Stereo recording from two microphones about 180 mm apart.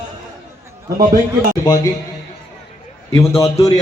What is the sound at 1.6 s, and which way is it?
Speech, 20° left (ahead or behind).